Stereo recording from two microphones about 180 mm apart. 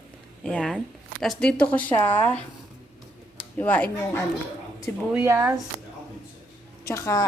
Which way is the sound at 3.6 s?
10° left (ahead or behind).